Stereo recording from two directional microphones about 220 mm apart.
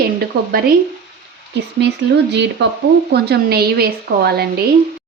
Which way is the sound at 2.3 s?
50° right (ahead or behind).